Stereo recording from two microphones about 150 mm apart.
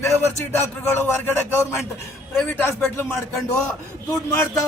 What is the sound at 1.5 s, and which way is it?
A man's voice, 15° left (ahead or behind).